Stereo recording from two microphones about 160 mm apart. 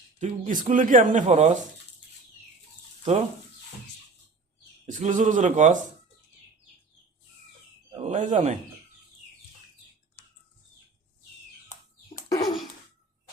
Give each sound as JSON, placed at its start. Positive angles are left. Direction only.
{"t": 0.2, "sound": "speech", "side_deg": -50}
{"t": 4.9, "sound": "speech", "side_deg": -50}
{"t": 8.0, "sound": "speech", "side_deg": -50}
{"t": 12.1, "sound": "bird", "side_deg": 20}